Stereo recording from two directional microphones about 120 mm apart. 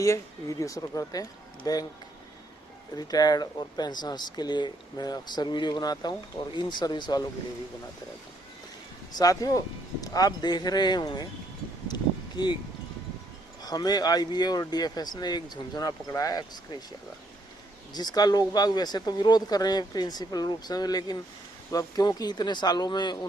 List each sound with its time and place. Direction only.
0.0 s speech: 25° left (ahead or behind)
2.9 s speech: 35° left (ahead or behind)
9.1 s speech: 30° left (ahead or behind)
12.4 s speech: 40° left (ahead or behind)
13.6 s speech: 35° left (ahead or behind)
17.9 s speech: 35° left (ahead or behind)